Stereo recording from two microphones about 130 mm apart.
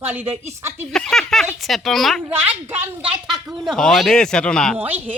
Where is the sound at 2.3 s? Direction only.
15° right (ahead or behind); by 4.8 s 5° left (ahead or behind).